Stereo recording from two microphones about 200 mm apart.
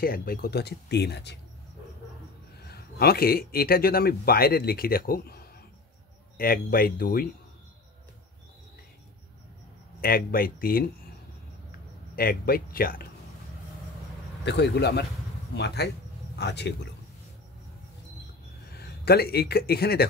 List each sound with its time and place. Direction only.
0.0 s speech: 45° left (ahead or behind)
2.6 s speech: 50° left (ahead or behind)
9.9 s speech: 45° left (ahead or behind)
12.2 s speech: 50° left (ahead or behind)
14.4 s speech: 60° left (ahead or behind)
18.8 s a man's voice: 50° left (ahead or behind)